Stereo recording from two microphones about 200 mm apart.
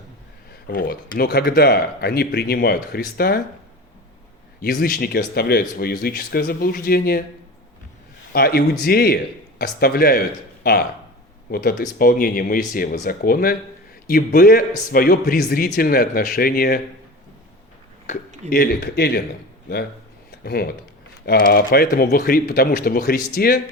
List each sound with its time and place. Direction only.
0.7 s speech: 45° left (ahead or behind)
4.6 s speech: 50° left (ahead or behind)
8.3 s a man's voice: 50° left (ahead or behind)
18.5 s speech: 50° left (ahead or behind)
20.4 s speech: 50° left (ahead or behind)